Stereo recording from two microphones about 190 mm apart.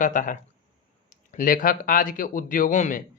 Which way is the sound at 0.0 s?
40° left (ahead or behind).